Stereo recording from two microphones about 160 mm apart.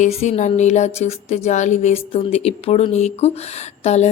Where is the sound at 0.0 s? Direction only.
45° left (ahead or behind).